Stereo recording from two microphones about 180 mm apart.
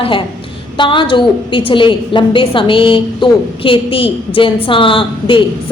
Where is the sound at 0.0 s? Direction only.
30° left (ahead or behind).